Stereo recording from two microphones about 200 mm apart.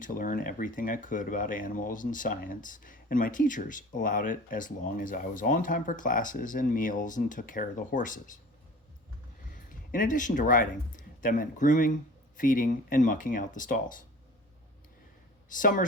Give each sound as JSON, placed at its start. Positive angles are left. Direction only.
{"t": 0.0, "sound": "speech", "side_deg": 40}
{"t": 9.6, "sound": "speech", "side_deg": 40}
{"t": 15.5, "sound": "speech", "side_deg": 40}